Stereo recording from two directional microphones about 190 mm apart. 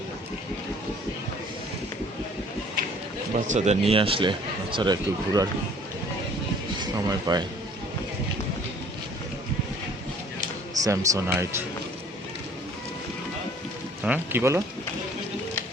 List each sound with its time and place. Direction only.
3.3 s speech: 40° right (ahead or behind); by 5.5 s 20° right (ahead or behind)
6.7 s speech: 20° right (ahead or behind)
10.8 s speech: 15° right (ahead or behind)
14.0 s speech: 10° right (ahead or behind)